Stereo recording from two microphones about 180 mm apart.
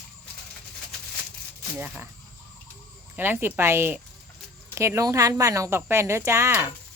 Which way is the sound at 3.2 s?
10° right (ahead or behind).